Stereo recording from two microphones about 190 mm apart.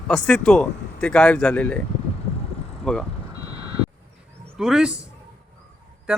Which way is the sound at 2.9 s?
5° left (ahead or behind).